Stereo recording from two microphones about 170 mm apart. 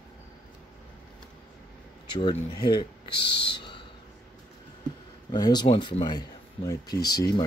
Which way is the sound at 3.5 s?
30° left (ahead or behind).